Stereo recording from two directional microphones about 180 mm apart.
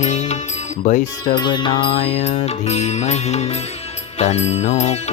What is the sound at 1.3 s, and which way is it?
Music, 25° left (ahead or behind).